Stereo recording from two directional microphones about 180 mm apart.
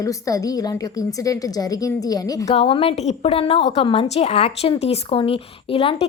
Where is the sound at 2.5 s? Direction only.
30° left (ahead or behind).